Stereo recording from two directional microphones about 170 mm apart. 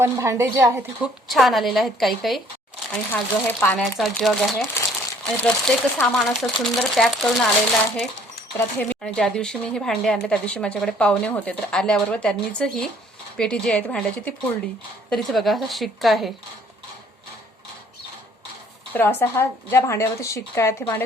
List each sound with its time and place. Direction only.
0.0 s a woman's voice: 15° right (ahead or behind)
1.0 s speech: centre (ahead or behind)
2.9 s speech: 10° left (ahead or behind)
19.2 s a woman's voice: 15° left (ahead or behind)